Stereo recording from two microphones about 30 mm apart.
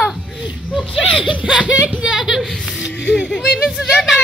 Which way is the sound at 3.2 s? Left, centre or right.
Left.